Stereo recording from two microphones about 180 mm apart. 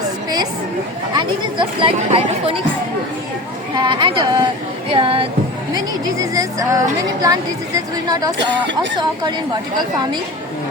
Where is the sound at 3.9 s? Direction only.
25° right (ahead or behind).